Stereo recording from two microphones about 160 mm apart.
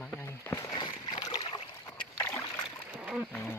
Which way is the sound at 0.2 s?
15° left (ahead or behind).